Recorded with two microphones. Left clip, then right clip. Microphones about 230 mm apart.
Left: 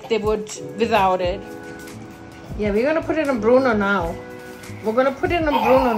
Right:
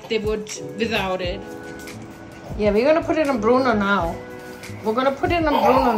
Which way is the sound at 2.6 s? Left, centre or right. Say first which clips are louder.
Right 3 dB; left.